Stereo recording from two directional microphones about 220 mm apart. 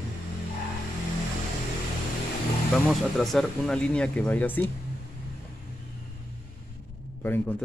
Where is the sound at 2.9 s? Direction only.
Centre (ahead or behind).